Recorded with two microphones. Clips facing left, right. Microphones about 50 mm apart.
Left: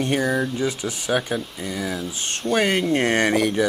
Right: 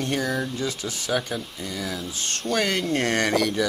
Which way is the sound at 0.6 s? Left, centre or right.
Centre.